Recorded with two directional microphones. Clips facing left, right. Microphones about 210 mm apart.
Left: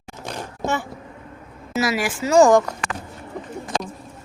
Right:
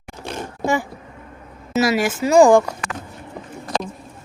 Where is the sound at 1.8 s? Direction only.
25° right (ahead or behind).